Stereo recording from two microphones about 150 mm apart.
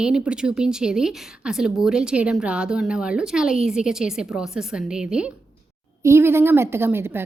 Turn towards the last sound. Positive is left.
turn(degrees=-15)  # may be behind; listen again after turning